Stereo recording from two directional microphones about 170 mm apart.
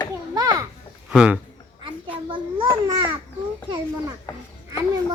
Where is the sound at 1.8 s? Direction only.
30° right (ahead or behind).